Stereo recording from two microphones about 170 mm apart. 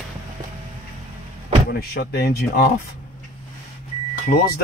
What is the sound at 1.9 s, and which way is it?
Speech, 70° left (ahead or behind).